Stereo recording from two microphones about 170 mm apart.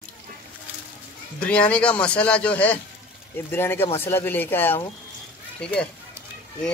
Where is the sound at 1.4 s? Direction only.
5° left (ahead or behind).